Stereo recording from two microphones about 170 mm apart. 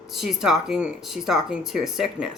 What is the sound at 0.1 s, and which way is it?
A woman's voice, centre (ahead or behind).